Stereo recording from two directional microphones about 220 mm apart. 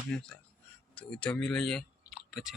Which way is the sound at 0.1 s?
5° left (ahead or behind).